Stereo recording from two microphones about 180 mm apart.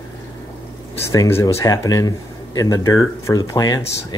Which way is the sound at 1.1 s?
15° left (ahead or behind).